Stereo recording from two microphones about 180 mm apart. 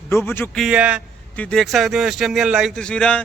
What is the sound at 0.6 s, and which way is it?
Speech, 5° right (ahead or behind).